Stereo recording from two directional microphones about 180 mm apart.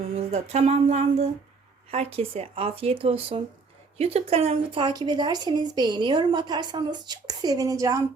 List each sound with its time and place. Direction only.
0.1 s speech: 35° right (ahead or behind); by 8.0 s 20° right (ahead or behind)